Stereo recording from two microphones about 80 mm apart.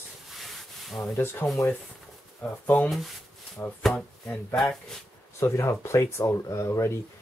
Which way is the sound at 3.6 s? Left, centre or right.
Centre.